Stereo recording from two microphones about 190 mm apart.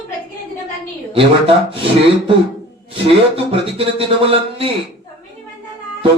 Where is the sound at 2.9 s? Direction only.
30° right (ahead or behind).